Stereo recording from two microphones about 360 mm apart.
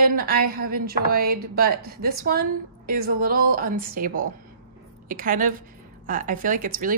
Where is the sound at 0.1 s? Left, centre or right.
Right.